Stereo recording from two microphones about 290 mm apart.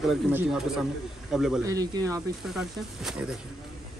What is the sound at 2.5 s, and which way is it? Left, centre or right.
Speech, centre.